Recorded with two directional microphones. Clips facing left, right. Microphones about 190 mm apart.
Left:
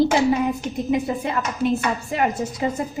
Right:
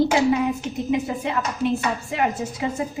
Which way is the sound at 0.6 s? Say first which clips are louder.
Left 1 dB; 40° left (ahead or behind).